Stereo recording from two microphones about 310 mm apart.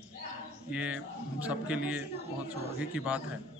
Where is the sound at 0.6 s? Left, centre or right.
Centre.